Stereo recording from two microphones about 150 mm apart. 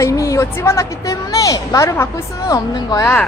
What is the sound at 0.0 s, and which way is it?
A woman's voice, 20° left (ahead or behind).